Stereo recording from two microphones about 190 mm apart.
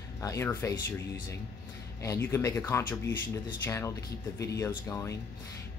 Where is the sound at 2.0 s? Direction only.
15° left (ahead or behind).